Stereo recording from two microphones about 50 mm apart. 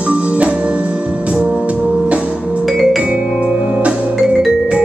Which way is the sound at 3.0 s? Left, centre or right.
Right.